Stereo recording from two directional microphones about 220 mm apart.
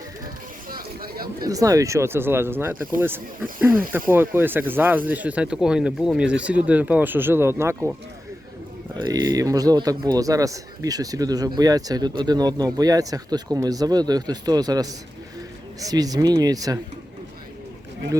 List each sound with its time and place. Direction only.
0.7 s a sound: 40° right (ahead or behind)
1.5 s a man's voice: 15° right (ahead or behind)
4.1 s a man's voice: 10° right (ahead or behind)
9.0 s a man's voice: 15° right (ahead or behind)